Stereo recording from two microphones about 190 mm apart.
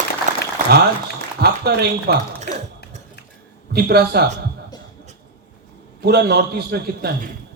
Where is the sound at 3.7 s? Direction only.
55° right (ahead or behind).